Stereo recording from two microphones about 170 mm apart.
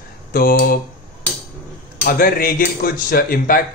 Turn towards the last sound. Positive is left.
turn(degrees=60)  # may be behind; listen again after turning